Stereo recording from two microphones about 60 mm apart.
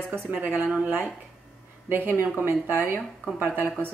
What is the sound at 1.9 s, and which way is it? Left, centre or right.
Speech, right.